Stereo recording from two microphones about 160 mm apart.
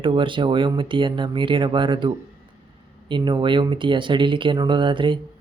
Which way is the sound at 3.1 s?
30° right (ahead or behind).